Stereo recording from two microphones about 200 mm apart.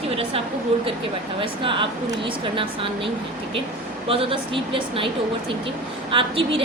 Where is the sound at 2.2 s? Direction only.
25° right (ahead or behind).